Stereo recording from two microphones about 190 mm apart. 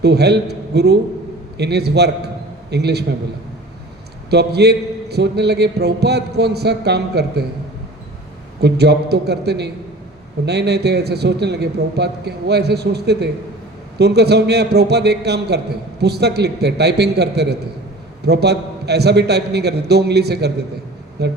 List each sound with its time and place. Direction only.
0.0 s a man's voice: 60° right (ahead or behind)
4.3 s a man's voice: 60° right (ahead or behind)
8.6 s a man's voice: 60° right (ahead or behind)